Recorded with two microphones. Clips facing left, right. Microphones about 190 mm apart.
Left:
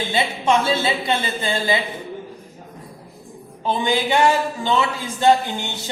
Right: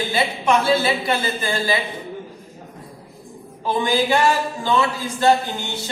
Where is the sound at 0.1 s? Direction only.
20° left (ahead or behind).